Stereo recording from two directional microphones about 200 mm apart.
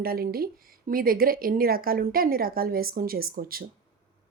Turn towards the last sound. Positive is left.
turn(degrees=-45)  # may be behind; listen again after turning